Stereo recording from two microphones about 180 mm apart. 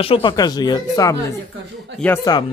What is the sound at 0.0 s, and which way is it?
Speech, 30° left (ahead or behind).